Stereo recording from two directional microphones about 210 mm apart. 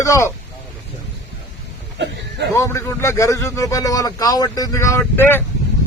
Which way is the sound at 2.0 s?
55° right (ahead or behind).